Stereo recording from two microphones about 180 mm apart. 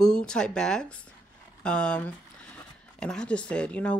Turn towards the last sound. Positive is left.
turn(degrees=5)  # may be behind; listen again after turning